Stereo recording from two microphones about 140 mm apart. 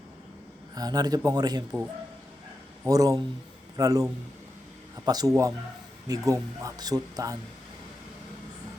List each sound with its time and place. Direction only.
0.8 s speech: 30° right (ahead or behind)
2.8 s speech: 25° right (ahead or behind)
5.0 s speech: 25° right (ahead or behind)